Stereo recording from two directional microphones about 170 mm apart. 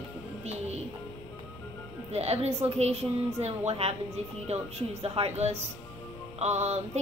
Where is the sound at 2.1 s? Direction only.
40° right (ahead or behind).